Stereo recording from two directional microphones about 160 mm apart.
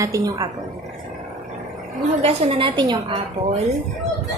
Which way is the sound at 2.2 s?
35° right (ahead or behind).